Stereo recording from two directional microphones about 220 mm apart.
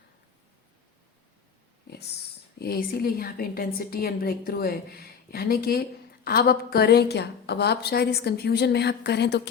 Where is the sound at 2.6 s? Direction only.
45° left (ahead or behind).